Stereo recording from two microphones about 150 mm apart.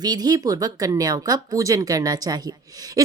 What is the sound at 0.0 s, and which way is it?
Speech, 25° right (ahead or behind).